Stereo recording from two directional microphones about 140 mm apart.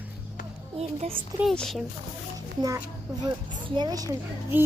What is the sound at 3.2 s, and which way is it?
Speech, 30° right (ahead or behind).